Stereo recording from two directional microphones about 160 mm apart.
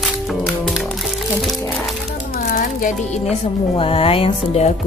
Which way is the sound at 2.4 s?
60° left (ahead or behind).